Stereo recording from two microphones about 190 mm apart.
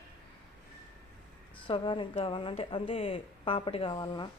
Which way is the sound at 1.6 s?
25° left (ahead or behind).